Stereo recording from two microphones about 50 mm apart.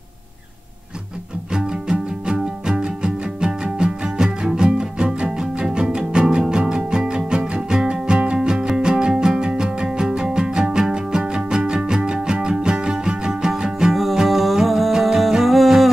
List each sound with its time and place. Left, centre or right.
1.5 s music: centre